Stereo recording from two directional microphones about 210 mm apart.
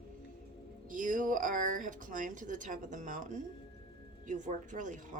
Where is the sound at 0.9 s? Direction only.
40° right (ahead or behind).